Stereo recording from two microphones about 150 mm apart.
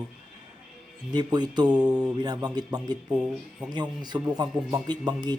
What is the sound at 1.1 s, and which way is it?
Speech, 30° right (ahead or behind).